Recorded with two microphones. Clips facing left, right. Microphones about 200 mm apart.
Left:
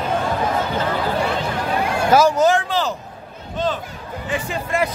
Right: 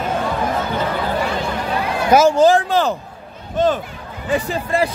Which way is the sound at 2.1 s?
30° right (ahead or behind).